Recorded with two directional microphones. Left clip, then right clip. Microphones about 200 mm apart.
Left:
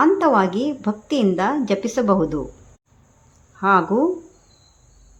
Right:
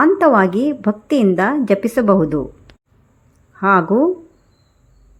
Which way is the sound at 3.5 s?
15° right (ahead or behind).